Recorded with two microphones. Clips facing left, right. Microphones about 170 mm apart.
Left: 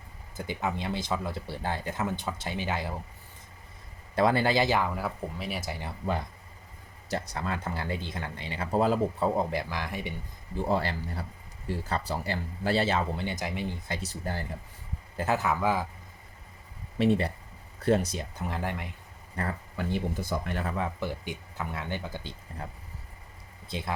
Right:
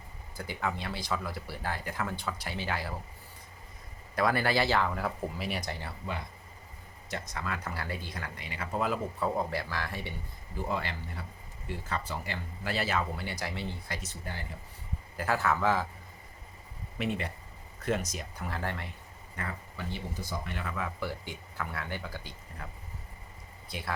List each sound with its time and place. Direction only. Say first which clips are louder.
0.3 s speech: left 3 dB; 20° left (ahead or behind)
4.1 s speech: left 4 dB; 25° left (ahead or behind)
4.9 s speech: even; centre (ahead or behind)
7.1 s speech: left 4 dB; 35° left (ahead or behind); by 10.1 s 15° left (ahead or behind)
10.5 s speech: left 6 dB; 30° left (ahead or behind)
14.0 s speech: left 6 dB; 40° left (ahead or behind)
15.2 s a man's voice: left 2 dB; 20° left (ahead or behind)
17.0 s speech: left 8 dB; 35° left (ahead or behind); by 18.9 s 15° left (ahead or behind)
19.4 s speech: left 6 dB; 45° left (ahead or behind)
20.7 s speech: left 4 dB; 25° left (ahead or behind)
23.6 s speech: left 5 dB; 25° left (ahead or behind)